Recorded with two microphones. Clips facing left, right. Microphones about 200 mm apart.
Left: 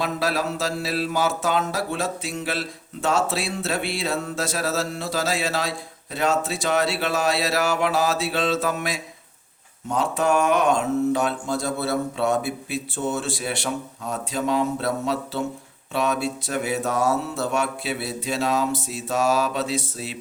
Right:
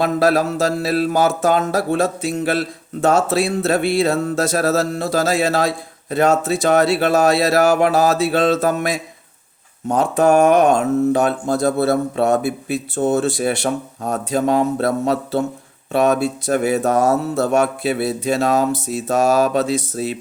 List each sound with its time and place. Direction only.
0.0 s speech: 45° right (ahead or behind)